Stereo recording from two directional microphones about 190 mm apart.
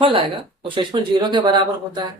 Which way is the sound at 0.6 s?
25° right (ahead or behind).